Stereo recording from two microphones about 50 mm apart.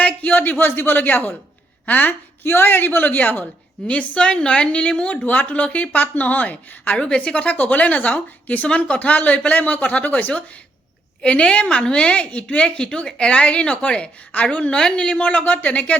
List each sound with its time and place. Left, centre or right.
0.0 s a sound: left
0.6 s a woman's voice: left
2.4 s a man's voice: left